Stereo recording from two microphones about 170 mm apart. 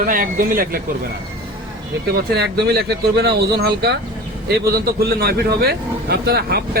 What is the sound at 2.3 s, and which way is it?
A man's voice, 70° right (ahead or behind).